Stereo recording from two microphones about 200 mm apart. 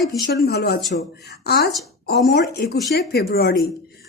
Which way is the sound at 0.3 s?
55° left (ahead or behind).